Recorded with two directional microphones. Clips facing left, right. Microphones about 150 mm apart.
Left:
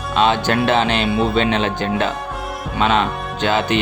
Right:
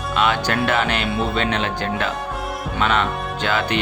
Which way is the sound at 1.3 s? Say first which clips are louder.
Left 4 dB; 20° left (ahead or behind).